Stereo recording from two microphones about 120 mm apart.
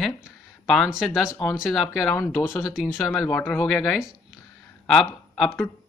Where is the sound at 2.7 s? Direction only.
Centre (ahead or behind).